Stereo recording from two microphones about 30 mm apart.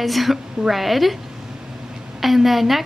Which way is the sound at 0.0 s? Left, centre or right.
Centre.